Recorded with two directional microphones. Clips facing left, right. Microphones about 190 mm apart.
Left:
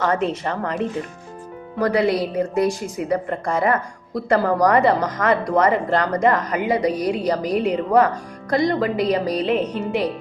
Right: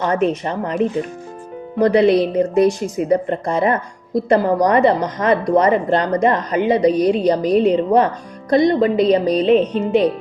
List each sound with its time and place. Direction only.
0.0 s a woman's voice: 20° right (ahead or behind)